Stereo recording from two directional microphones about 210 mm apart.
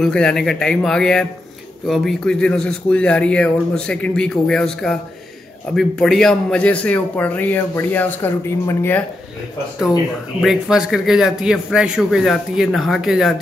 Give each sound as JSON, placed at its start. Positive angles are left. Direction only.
{"t": 0.0, "sound": "a man's voice", "side_deg": 5}
{"t": 10.4, "sound": "speech", "side_deg": 0}